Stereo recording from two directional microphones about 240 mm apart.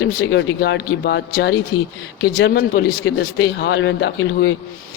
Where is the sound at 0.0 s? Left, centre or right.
Left.